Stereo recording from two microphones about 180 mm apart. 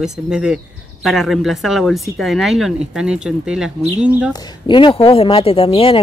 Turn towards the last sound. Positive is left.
turn(degrees=30)  # may be behind; listen again after turning